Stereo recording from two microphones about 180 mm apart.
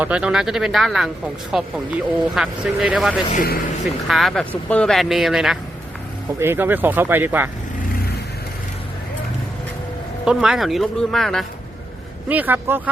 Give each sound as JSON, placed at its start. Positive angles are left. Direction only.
{"t": 0.0, "sound": "speech", "side_deg": -5}
{"t": 3.3, "sound": "speech", "side_deg": 55}
{"t": 4.1, "sound": "speech", "side_deg": 0}
{"t": 10.2, "sound": "speech", "side_deg": -5}
{"t": 12.3, "sound": "speech", "side_deg": -10}